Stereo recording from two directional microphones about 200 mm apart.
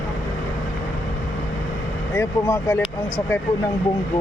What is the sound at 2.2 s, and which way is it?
Speech, 15° left (ahead or behind).